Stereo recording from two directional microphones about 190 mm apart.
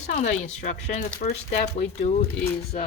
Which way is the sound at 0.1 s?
35° left (ahead or behind).